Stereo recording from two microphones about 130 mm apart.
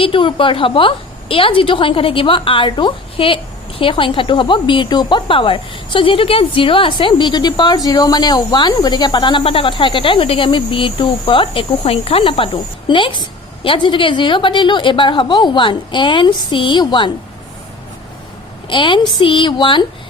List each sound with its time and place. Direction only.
0.0 s a woman's voice: 40° left (ahead or behind)
18.7 s a woman's voice: 40° left (ahead or behind)